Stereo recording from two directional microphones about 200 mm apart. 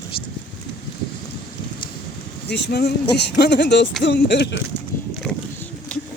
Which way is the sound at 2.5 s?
55° left (ahead or behind).